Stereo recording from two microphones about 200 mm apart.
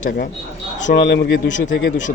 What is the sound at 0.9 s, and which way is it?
A man's voice, 60° left (ahead or behind).